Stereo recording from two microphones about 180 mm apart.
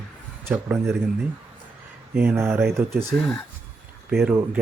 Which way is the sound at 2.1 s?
10° right (ahead or behind).